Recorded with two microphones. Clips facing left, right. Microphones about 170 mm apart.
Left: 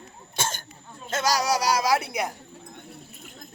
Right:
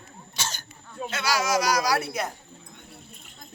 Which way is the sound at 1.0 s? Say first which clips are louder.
Left 2 dB; 40° left (ahead or behind).